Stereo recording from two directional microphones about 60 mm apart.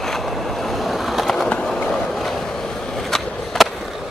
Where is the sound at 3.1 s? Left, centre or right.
Centre.